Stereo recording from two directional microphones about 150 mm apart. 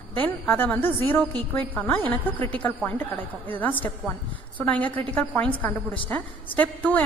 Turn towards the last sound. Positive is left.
turn(degrees=10)  # may be behind; listen again after turning